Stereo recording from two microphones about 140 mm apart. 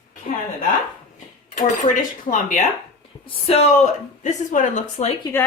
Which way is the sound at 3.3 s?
45° left (ahead or behind).